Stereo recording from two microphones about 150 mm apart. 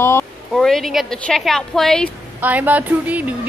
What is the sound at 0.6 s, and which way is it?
A woman's voice, centre (ahead or behind).